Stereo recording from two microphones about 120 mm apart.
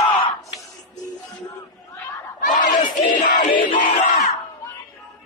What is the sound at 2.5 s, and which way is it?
Battle cry, 90° left.